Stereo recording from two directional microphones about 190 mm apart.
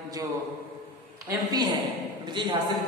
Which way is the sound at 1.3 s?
20° right (ahead or behind).